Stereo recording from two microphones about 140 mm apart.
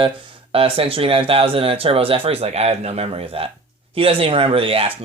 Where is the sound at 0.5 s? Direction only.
40° right (ahead or behind).